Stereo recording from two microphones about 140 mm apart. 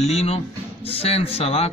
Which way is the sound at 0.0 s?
50° left (ahead or behind).